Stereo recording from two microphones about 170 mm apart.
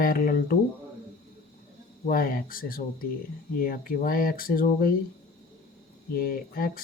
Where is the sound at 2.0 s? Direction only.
55° left (ahead or behind).